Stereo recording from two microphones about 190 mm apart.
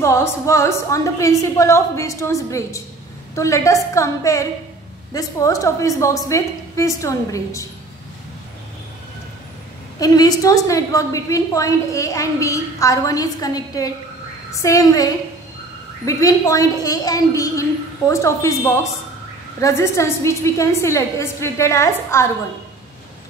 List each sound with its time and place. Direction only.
0.0 s a woman's voice: 15° left (ahead or behind)
9.9 s a woman's voice: 20° left (ahead or behind)